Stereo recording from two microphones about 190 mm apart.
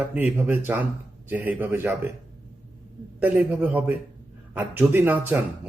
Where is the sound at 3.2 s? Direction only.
10° right (ahead or behind).